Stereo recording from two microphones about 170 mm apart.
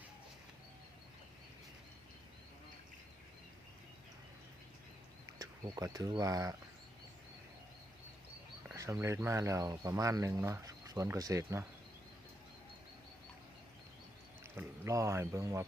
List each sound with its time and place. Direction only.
5.4 s speech: 20° right (ahead or behind)
8.7 s speech: 15° right (ahead or behind)
14.5 s speech: 15° right (ahead or behind)